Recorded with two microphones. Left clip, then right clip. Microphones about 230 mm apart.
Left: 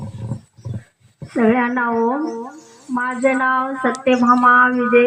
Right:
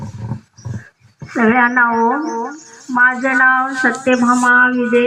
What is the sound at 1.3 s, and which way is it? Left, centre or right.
Speech, right.